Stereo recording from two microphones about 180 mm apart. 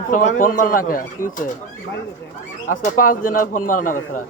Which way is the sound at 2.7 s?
45° left (ahead or behind).